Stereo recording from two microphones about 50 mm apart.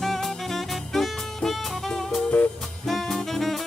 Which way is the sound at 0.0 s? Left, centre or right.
Centre.